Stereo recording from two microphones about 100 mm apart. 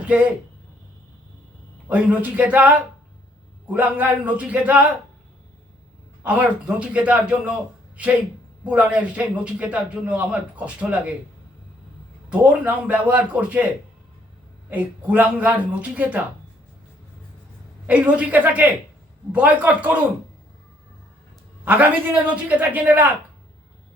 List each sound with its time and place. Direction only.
0.0 s speech: 10° right (ahead or behind)
1.9 s a man's voice: 15° right (ahead or behind)
6.2 s a man's voice: 15° right (ahead or behind)
8.6 s a man's voice: 15° right (ahead or behind)
12.3 s a man's voice: 15° right (ahead or behind)
14.7 s a man's voice: 15° right (ahead or behind)
17.8 s a man's voice: 15° right (ahead or behind)
21.6 s a man's voice: 20° right (ahead or behind)